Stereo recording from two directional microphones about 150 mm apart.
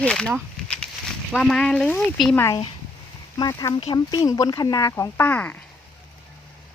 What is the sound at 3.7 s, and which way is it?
Speech, 35° left (ahead or behind).